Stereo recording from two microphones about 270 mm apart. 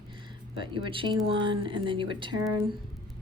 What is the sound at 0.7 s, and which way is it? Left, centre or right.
Speech, centre.